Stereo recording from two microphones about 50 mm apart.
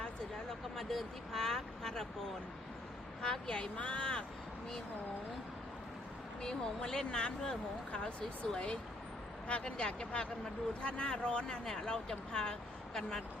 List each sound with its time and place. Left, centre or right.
0.8 s speech: centre
3.3 s speech: centre
6.4 s speech: centre